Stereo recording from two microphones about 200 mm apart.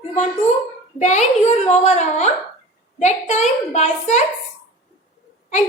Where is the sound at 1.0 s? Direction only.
35° left (ahead or behind).